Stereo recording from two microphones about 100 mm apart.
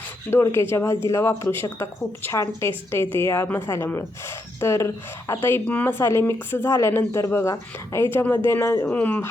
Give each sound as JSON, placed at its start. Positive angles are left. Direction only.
{"t": 0.3, "sound": "a woman's voice", "side_deg": 25}
{"t": 8.9, "sound": "speech", "side_deg": 15}